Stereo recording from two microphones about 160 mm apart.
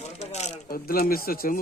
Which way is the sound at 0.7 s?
70° left (ahead or behind).